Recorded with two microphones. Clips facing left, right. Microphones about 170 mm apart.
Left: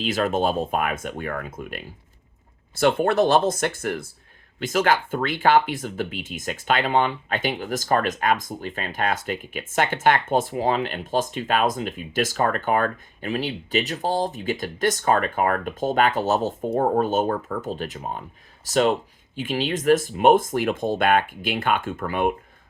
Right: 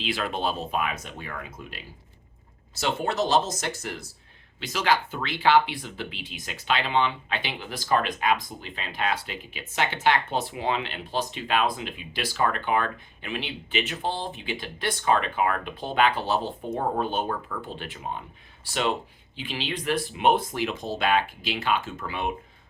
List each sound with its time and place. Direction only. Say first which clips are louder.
0.0 s speech: left 6 dB; 45° left (ahead or behind)